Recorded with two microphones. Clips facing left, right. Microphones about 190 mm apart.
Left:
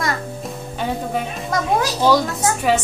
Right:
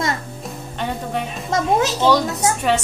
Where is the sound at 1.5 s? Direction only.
25° right (ahead or behind).